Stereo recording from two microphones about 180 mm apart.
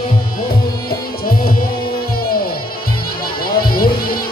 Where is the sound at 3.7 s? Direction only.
55° left (ahead or behind).